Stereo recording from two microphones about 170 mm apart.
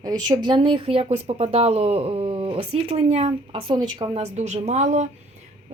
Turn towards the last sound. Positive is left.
turn(degrees=-45)  # may be behind; listen again after turning